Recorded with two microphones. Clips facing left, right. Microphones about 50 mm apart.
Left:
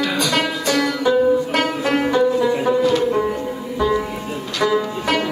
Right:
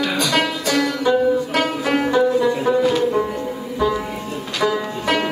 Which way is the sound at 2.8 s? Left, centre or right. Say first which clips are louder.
Left 1 dB; centre.